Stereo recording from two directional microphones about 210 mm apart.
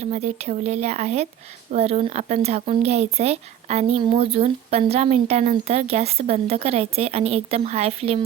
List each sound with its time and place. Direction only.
0.0 s speech: 30° right (ahead or behind)